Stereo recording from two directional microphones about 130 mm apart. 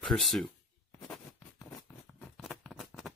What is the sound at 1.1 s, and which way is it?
Zipper, 5° left (ahead or behind).